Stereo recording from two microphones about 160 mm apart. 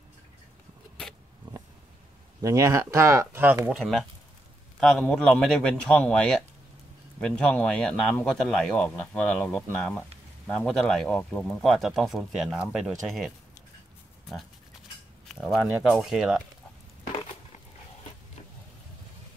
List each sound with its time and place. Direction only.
2.4 s speech: 20° right (ahead or behind)
4.7 s speech: centre (ahead or behind)
15.2 s speech: centre (ahead or behind)